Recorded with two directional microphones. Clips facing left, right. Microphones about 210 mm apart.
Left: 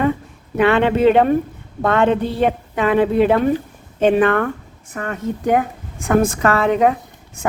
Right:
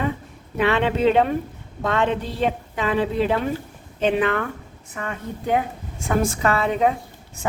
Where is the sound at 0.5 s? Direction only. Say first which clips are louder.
Left 5 dB; 55° left (ahead or behind).